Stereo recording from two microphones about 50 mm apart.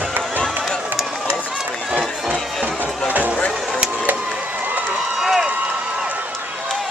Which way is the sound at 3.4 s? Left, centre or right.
Left.